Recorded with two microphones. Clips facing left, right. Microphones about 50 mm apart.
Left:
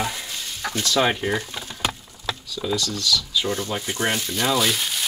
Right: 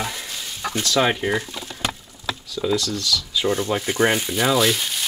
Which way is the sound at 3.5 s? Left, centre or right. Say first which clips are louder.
Right 5 dB; right.